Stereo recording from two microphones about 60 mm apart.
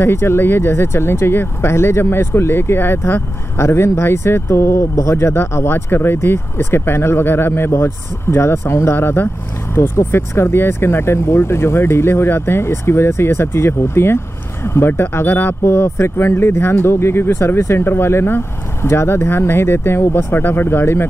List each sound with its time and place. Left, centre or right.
0.0 s speech: left